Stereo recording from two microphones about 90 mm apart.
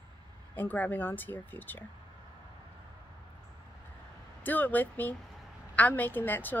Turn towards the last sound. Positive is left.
turn(degrees=20)  # may be behind; listen again after turning